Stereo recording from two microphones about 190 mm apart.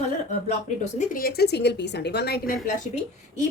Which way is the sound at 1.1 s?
50° left (ahead or behind).